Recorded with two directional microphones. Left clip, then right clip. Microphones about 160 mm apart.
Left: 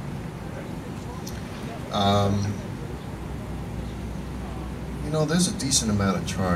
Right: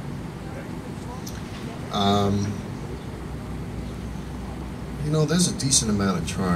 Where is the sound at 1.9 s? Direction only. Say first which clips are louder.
Even; 55° right (ahead or behind).